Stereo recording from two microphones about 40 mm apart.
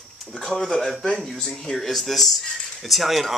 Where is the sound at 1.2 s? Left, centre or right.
Centre.